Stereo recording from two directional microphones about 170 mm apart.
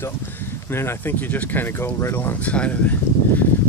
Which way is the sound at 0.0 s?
15° left (ahead or behind).